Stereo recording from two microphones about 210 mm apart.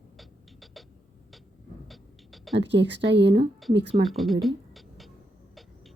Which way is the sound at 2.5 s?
55° right (ahead or behind).